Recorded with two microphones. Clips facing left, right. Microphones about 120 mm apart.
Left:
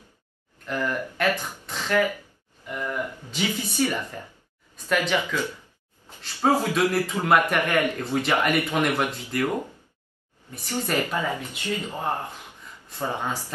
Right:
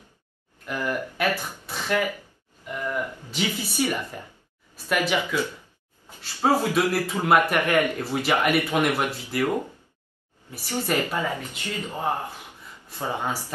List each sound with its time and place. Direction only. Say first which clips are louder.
0.7 s speech: left 1 dB; 10° right (ahead or behind)
1.7 s a sound: left 2 dB; 15° right (ahead or behind)
3.3 s speech: left 1 dB; 15° right (ahead or behind)
11.6 s speech: left 6 dB; 15° left (ahead or behind)
11.9 s speech: right 1 dB; 10° right (ahead or behind)